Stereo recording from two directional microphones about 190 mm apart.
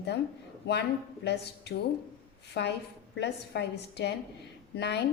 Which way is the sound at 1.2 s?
60° left (ahead or behind).